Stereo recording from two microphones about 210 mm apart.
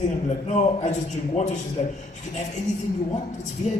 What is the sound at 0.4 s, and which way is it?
A man's voice, 35° left (ahead or behind).